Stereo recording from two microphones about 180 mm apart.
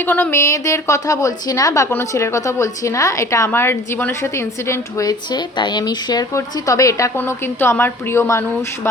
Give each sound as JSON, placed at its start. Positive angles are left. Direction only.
{"t": 0.0, "sound": "a woman's voice", "side_deg": 10}